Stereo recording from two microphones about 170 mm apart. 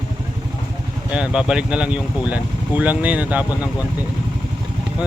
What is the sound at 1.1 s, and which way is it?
Speech, 5° right (ahead or behind).